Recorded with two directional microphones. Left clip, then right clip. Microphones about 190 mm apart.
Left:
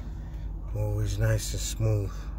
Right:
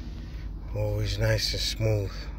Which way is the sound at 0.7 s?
Centre (ahead or behind).